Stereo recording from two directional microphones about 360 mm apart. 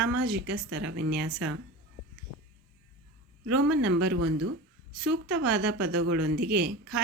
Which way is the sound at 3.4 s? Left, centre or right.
Right.